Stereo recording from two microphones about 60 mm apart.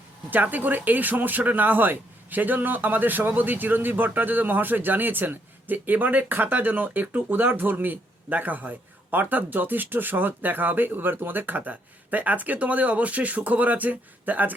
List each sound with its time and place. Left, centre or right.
0.3 s speech: right